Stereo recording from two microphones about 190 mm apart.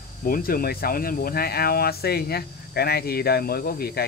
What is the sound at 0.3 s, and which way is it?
Speech, 50° left (ahead or behind).